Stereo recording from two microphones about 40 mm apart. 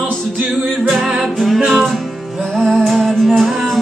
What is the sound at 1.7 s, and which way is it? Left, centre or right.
Music, centre.